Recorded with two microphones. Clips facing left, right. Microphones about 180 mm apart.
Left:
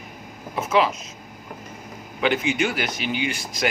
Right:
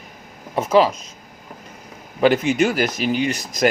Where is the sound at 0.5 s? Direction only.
35° right (ahead or behind).